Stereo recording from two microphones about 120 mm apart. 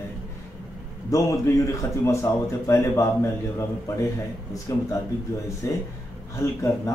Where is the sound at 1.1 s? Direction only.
25° left (ahead or behind).